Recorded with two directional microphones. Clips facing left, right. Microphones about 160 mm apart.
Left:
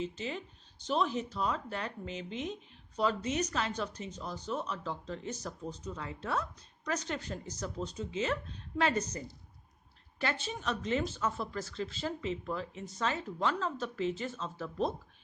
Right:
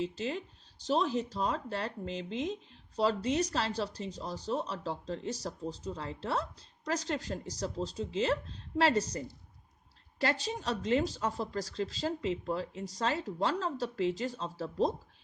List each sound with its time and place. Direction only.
0.0 s speech: 35° right (ahead or behind)